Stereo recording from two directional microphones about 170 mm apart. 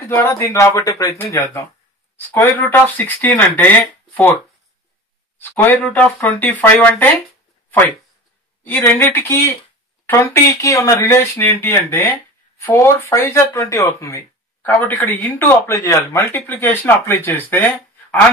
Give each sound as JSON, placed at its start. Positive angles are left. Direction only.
{"t": 0.1, "sound": "speech", "side_deg": 15}
{"t": 5.7, "sound": "speech", "side_deg": 10}
{"t": 8.6, "sound": "speech", "side_deg": 10}